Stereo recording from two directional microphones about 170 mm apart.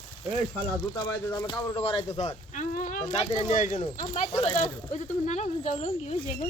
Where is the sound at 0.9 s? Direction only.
25° left (ahead or behind).